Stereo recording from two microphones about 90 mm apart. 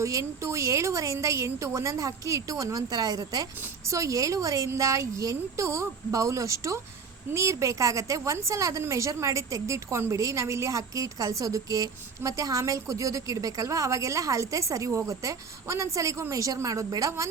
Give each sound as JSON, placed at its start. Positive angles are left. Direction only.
{"t": 0.0, "sound": "a woman's voice", "side_deg": -35}